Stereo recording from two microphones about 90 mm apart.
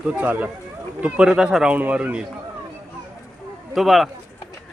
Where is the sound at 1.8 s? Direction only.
20° right (ahead or behind).